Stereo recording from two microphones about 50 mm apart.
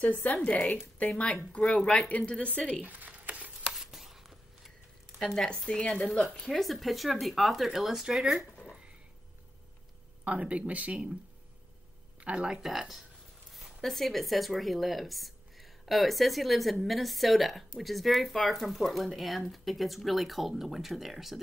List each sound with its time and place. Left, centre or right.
0.1 s a woman's voice: left
2.8 s a sound: right
3.7 s a sound: centre
5.3 s a woman's voice: centre
6.5 s speech: centre
8.6 s a sound: centre
10.2 s speech: right
12.2 s speech: right
12.6 s speech: centre